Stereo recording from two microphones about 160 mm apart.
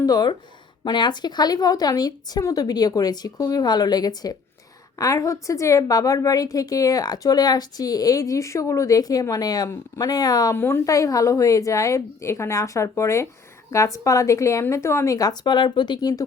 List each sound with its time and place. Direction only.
0.0 s a woman's voice: 25° left (ahead or behind)